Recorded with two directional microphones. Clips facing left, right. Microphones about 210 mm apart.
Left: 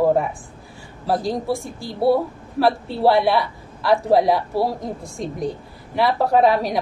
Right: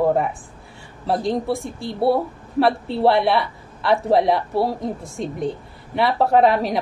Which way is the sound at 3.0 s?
Centre (ahead or behind).